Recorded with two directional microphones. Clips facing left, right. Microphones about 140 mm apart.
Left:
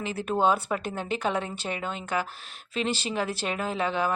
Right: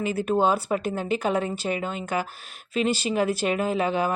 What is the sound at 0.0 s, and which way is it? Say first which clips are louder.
Speech: right 3 dB; 10° right (ahead or behind).